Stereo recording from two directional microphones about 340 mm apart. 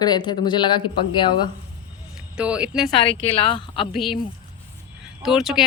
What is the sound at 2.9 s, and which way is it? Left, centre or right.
Speech, centre.